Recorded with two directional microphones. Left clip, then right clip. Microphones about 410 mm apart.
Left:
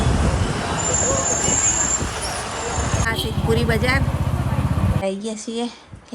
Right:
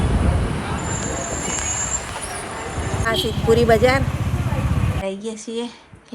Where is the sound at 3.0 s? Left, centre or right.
Centre.